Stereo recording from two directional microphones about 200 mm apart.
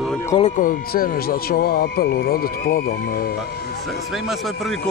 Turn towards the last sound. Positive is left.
turn(degrees=50)  # may be behind; listen again after turning